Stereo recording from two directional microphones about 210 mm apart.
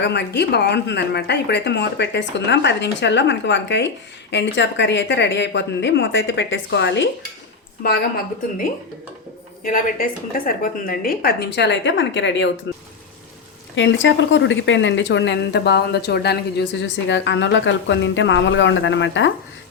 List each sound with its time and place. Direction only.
0.0 s speech: 55° left (ahead or behind)
9.6 s a woman's voice: 40° left (ahead or behind); by 19.3 s 60° left (ahead or behind)